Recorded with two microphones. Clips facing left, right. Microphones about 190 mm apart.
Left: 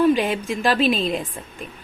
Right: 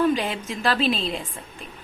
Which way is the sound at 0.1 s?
15° left (ahead or behind).